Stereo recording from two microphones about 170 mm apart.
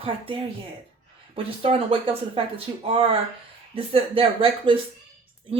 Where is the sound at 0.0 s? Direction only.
35° right (ahead or behind).